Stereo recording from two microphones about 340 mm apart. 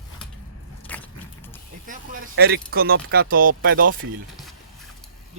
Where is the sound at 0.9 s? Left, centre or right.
Centre.